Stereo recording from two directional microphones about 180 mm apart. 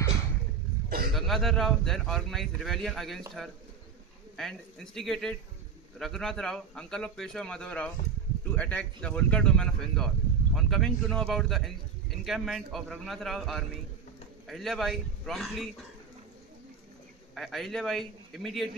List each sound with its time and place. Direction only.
0.8 s throat clearing: 55° right (ahead or behind)
1.1 s speech: centre (ahead or behind)
4.4 s speech: centre (ahead or behind)
17.4 s speech: centre (ahead or behind)